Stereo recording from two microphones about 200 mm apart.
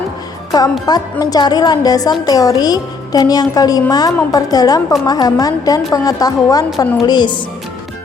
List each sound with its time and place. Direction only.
0.5 s a child's voice: 20° left (ahead or behind)